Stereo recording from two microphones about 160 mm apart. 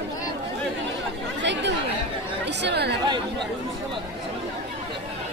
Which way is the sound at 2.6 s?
90° right.